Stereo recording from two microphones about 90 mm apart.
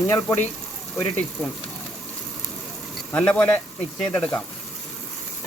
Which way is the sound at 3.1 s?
15° left (ahead or behind).